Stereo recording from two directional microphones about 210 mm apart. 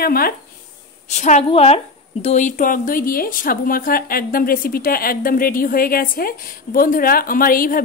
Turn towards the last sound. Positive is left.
turn(degrees=45)  # may be behind; listen again after turning